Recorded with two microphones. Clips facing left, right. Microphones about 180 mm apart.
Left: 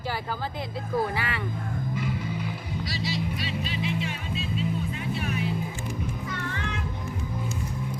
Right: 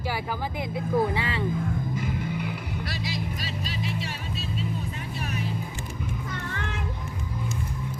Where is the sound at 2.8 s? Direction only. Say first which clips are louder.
Left 4 dB; 60° right (ahead or behind).